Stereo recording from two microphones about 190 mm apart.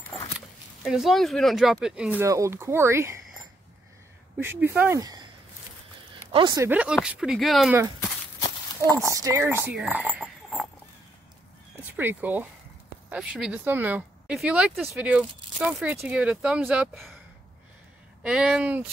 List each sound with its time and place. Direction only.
0.8 s speech: centre (ahead or behind)
4.4 s speech: 10° right (ahead or behind)
6.3 s speech: 25° right (ahead or behind)
6.6 s speech: 10° right (ahead or behind)
8.8 s speech: 15° right (ahead or behind)
12.0 s speech: 10° right (ahead or behind)
18.2 s speech: 5° right (ahead or behind)